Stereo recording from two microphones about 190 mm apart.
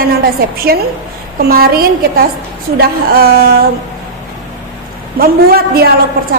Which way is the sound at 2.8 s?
55° right (ahead or behind).